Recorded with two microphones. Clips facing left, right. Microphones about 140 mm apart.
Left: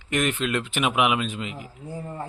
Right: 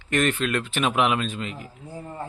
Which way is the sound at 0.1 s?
15° left (ahead or behind).